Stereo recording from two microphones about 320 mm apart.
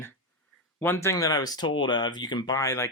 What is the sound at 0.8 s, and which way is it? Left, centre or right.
Speech, centre.